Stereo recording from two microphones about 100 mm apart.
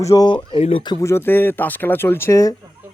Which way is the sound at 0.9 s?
25° left (ahead or behind).